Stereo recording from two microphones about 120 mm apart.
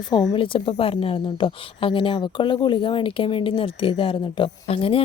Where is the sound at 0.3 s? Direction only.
45° left (ahead or behind).